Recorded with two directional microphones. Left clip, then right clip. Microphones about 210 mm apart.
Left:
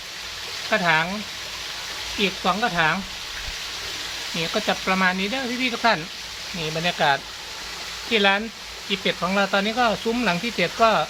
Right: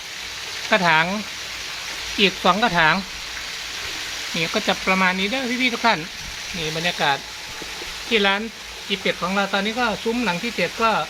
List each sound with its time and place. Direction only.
0.7 s speech: 20° right (ahead or behind)
2.1 s speech: 30° right (ahead or behind)
4.4 s speech: 10° right (ahead or behind); by 11.0 s 10° left (ahead or behind)